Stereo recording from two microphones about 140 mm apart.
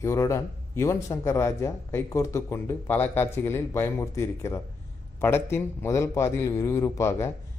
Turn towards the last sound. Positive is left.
turn(degrees=20)  # may be behind; listen again after turning